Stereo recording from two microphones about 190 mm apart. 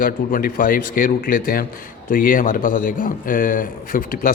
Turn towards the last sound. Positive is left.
turn(degrees=45)  # may be behind; listen again after turning